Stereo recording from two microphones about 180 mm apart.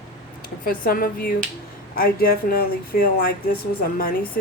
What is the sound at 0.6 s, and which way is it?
Speech, 55° left (ahead or behind).